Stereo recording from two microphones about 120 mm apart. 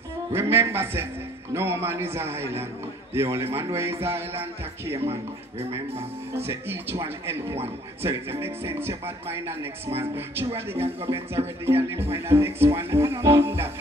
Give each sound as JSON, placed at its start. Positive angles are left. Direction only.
{"t": 0.3, "sound": "speech", "side_deg": -20}
{"t": 5.6, "sound": "speech", "side_deg": -55}
{"t": 6.4, "sound": "speech", "side_deg": -20}
{"t": 10.8, "sound": "speech", "side_deg": -55}
{"t": 11.3, "sound": "speech", "side_deg": -20}